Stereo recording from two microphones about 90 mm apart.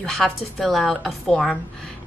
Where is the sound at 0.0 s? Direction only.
5° left (ahead or behind).